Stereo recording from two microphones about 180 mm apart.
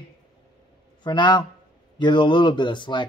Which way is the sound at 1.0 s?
25° left (ahead or behind).